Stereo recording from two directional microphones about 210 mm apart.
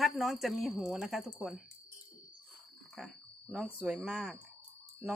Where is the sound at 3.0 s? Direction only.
Centre (ahead or behind).